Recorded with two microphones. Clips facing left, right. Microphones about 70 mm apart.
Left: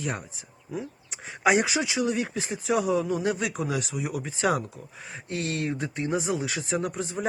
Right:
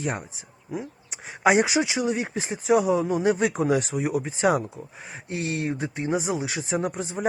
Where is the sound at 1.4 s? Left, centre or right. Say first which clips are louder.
Right 3 dB; right.